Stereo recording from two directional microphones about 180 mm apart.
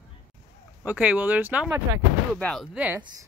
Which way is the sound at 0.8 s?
10° right (ahead or behind).